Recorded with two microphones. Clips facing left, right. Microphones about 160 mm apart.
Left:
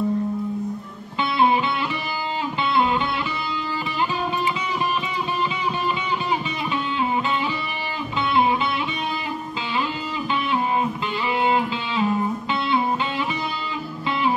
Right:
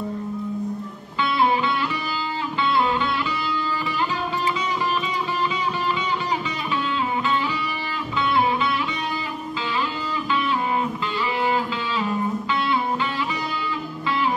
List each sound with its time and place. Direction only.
11.4 s guitar: 20° left (ahead or behind)